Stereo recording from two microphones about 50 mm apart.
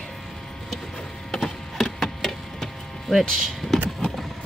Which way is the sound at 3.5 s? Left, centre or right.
Centre.